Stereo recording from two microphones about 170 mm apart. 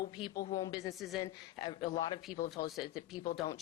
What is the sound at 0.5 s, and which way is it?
Speech, 25° left (ahead or behind).